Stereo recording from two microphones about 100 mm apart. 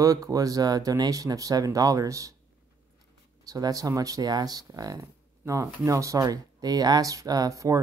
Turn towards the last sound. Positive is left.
turn(degrees=-35)  # may be behind; listen again after turning